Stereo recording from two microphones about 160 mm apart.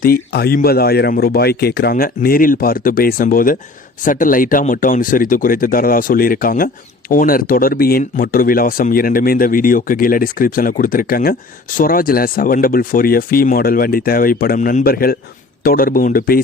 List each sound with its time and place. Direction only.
0.0 s speech: 70° left (ahead or behind)